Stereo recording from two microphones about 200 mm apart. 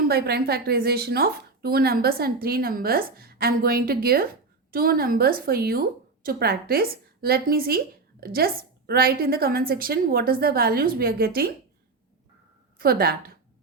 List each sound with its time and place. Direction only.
0.1 s speech: 50° right (ahead or behind)
12.8 s speech: 50° right (ahead or behind)